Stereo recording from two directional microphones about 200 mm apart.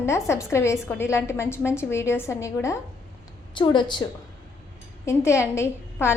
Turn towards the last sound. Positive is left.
turn(degrees=15)  # may be behind; listen again after turning